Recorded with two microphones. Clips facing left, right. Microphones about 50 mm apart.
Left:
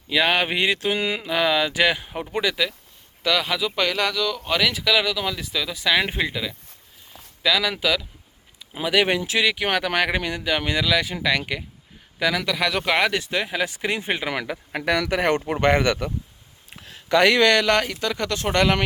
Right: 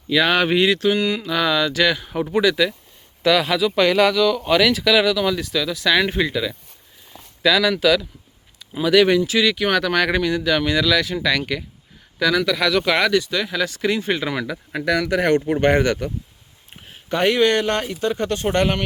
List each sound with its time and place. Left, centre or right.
0.1 s speech: centre
0.9 s mantra: left
1.3 s speech: centre
14.3 s mantra: left
14.7 s speech: left
16.8 s speech: left